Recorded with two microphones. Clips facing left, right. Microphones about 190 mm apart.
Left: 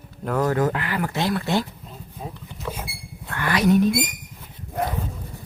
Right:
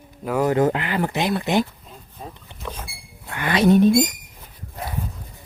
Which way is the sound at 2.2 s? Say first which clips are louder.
Left 2 dB; 5° left (ahead or behind).